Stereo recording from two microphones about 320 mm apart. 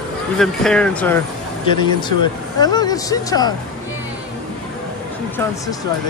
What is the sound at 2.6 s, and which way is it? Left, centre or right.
Speech, centre.